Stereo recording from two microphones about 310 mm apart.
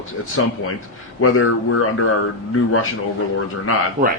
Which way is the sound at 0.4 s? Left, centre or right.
Left.